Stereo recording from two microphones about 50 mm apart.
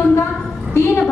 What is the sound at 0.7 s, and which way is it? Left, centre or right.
Speech, left.